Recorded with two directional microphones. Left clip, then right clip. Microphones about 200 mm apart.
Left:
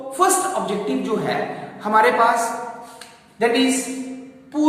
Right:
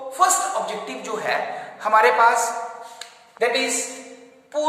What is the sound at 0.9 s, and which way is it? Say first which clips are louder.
Speech: left 3 dB; 40° right (ahead or behind).